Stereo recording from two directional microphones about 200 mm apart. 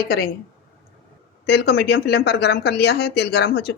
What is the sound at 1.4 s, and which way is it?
Speech, 55° left (ahead or behind).